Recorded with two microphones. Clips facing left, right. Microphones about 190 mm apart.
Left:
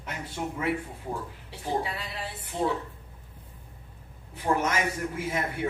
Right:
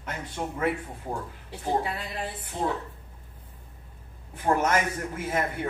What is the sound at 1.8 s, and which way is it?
Speech, 50° right (ahead or behind).